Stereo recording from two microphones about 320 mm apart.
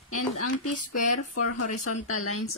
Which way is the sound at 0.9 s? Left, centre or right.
Left.